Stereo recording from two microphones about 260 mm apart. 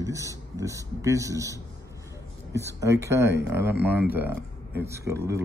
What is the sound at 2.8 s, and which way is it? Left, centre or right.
A man's voice, centre.